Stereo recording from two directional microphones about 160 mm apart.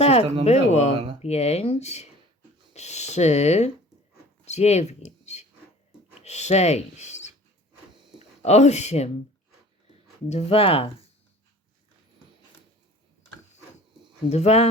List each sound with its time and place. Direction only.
0.0 s a sound: 40° left (ahead or behind)
0.4 s speech: 45° left (ahead or behind)
8.4 s speech: 45° left (ahead or behind)
10.2 s speech: 40° left (ahead or behind)
14.3 s speech: 40° left (ahead or behind)